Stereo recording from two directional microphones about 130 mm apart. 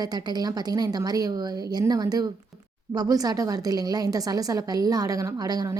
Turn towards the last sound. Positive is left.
turn(degrees=-30)  # may be behind; listen again after turning